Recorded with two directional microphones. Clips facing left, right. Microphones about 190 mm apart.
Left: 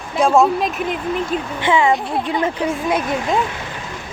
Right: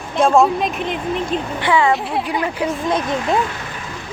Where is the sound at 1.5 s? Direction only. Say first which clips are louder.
Even; 20° left (ahead or behind).